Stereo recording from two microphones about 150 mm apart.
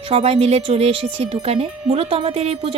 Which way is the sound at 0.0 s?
40° right (ahead or behind).